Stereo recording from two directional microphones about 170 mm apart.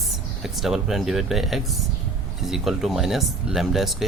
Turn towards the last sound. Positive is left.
turn(degrees=0)  # may be behind; listen again after turning